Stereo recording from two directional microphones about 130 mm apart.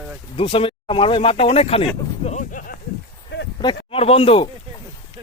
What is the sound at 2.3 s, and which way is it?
Speech, 75° left (ahead or behind).